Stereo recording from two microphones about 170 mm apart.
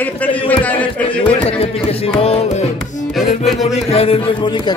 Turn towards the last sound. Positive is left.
turn(degrees=30)  # may be behind; listen again after turning